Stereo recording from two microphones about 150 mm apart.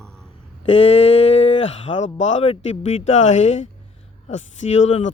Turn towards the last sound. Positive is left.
turn(degrees=50)  # may be behind; listen again after turning